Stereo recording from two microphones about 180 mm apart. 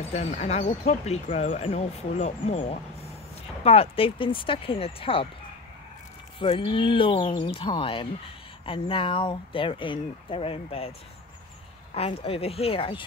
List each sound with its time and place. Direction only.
0.1 s speech: 40° left (ahead or behind)
6.4 s speech: 30° left (ahead or behind)
11.9 s speech: 30° left (ahead or behind)